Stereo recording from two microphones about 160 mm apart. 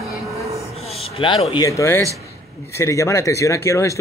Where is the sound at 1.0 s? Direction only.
35° left (ahead or behind).